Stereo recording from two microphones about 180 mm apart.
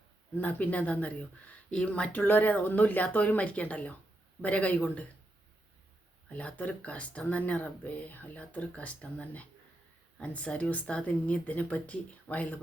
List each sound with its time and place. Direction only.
0.3 s speech: 10° left (ahead or behind)
6.2 s speech: 5° left (ahead or behind)